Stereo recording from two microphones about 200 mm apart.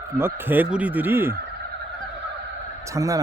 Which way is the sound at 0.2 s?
10° right (ahead or behind).